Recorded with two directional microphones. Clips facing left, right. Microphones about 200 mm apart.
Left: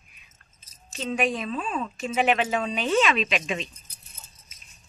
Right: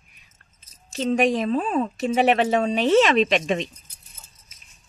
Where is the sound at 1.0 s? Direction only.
35° right (ahead or behind).